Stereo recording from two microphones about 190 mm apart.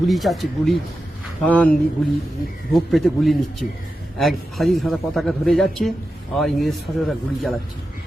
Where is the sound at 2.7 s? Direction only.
Centre (ahead or behind).